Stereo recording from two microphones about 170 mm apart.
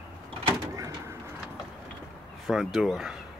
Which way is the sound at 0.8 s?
20° right (ahead or behind).